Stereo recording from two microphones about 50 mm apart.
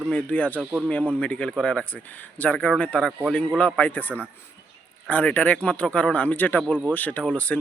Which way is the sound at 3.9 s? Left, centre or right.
Left.